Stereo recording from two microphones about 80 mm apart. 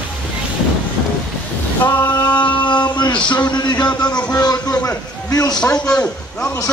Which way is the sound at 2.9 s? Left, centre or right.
Left.